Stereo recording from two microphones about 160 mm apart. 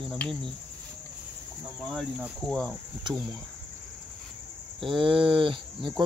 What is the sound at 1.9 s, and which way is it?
Cricket, 5° left (ahead or behind).